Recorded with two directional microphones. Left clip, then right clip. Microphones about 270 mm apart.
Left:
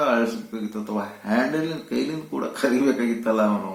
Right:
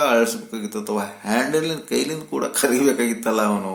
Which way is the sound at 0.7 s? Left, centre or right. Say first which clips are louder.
Right 5 dB; right.